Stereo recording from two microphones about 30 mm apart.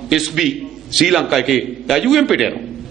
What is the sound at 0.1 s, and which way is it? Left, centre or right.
A man's voice, centre.